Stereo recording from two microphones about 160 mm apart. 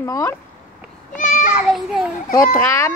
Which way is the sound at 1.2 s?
55° left (ahead or behind).